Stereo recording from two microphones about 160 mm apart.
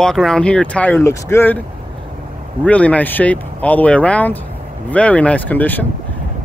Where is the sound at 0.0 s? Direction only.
5° left (ahead or behind).